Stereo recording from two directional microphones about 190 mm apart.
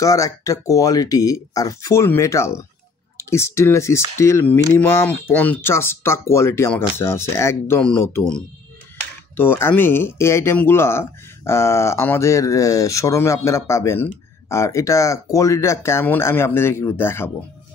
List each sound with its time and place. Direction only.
0.0 s speech: 15° left (ahead or behind)
9.4 s speech: 10° left (ahead or behind)